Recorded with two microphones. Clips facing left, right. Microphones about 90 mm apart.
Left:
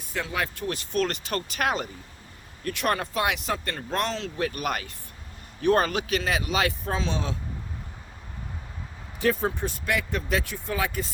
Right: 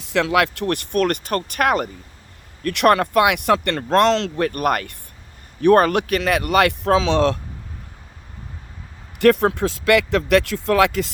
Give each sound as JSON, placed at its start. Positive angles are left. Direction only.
{"t": 0.0, "sound": "speech", "side_deg": -90}
{"t": 4.4, "sound": "speech", "side_deg": -50}
{"t": 9.1, "sound": "speech", "side_deg": -75}